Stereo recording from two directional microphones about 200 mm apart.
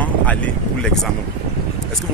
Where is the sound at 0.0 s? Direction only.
5° left (ahead or behind).